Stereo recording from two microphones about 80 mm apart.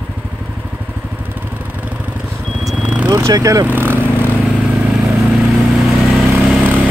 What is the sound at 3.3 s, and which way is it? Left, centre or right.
Speech, right.